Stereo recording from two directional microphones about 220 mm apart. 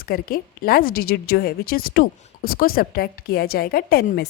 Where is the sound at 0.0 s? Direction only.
45° left (ahead or behind).